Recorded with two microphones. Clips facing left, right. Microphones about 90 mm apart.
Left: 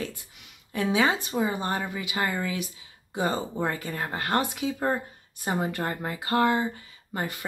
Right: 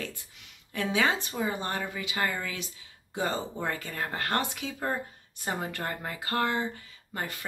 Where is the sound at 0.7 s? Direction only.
15° left (ahead or behind).